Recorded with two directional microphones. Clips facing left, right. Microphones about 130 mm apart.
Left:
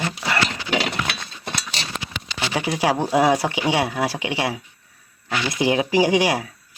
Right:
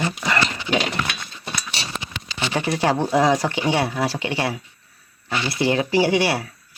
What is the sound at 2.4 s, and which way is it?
Speech, 10° left (ahead or behind).